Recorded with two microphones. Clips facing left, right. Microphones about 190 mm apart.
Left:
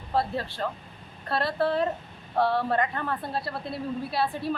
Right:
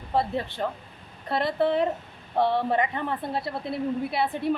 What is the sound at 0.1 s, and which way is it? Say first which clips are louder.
A woman's voice: right 1 dB; 20° right (ahead or behind).